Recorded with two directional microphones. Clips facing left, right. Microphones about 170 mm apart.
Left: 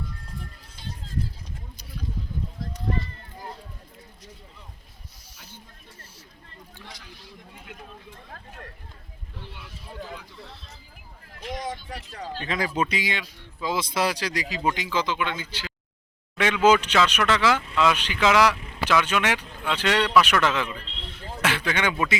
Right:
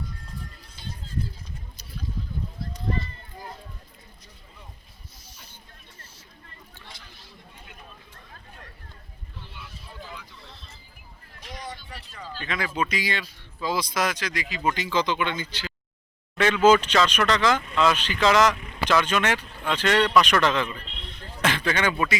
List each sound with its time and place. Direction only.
11.6 s a sound: 45° left (ahead or behind)
12.5 s speech: 35° left (ahead or behind)
12.8 s speech: 20° left (ahead or behind)
14.6 s speech: 15° left (ahead or behind)